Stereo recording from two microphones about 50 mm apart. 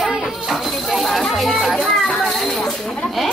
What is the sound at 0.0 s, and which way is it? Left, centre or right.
Tambourine, centre.